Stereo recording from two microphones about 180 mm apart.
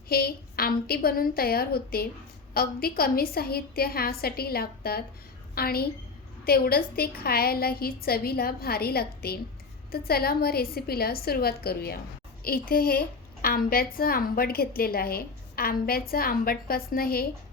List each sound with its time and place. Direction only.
0.1 s a woman's voice: 60° left (ahead or behind)